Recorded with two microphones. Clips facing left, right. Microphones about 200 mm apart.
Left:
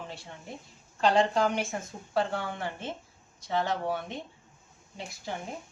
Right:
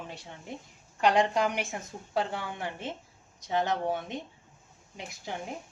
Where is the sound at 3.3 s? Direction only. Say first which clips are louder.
Right 1 dB; 20° right (ahead or behind).